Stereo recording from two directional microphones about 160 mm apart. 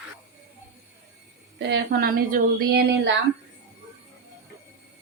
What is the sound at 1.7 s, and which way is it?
A woman's voice, 75° right (ahead or behind).